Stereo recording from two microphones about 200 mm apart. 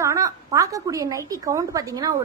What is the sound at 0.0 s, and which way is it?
A woman's voice, 15° right (ahead or behind).